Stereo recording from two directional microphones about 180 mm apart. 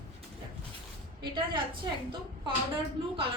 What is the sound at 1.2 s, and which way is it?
Speech, 25° right (ahead or behind).